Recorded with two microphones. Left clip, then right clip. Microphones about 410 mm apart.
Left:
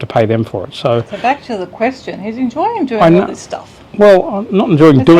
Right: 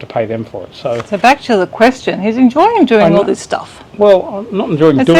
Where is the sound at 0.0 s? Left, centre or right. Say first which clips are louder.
Left 4 dB; left.